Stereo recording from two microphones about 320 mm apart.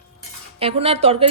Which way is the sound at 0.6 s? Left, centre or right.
Centre.